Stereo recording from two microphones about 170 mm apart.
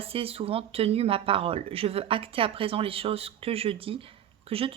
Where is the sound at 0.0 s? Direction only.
35° right (ahead or behind).